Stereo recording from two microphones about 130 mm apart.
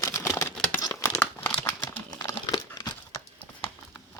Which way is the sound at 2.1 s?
30° left (ahead or behind).